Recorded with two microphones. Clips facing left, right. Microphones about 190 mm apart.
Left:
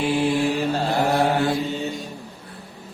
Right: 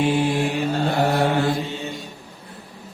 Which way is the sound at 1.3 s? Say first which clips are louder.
Even; 35° left (ahead or behind).